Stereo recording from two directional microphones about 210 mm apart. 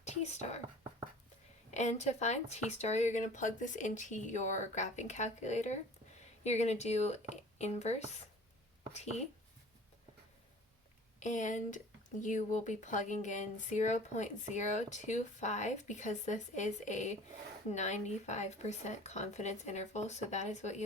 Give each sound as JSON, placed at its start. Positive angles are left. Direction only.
{"t": 0.0, "sound": "speech", "side_deg": 30}
{"t": 1.7, "sound": "speech", "side_deg": 35}
{"t": 11.2, "sound": "speech", "side_deg": 35}